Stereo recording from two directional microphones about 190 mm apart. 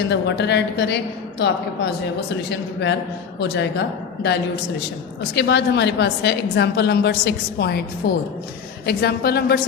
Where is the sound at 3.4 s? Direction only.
60° left (ahead or behind).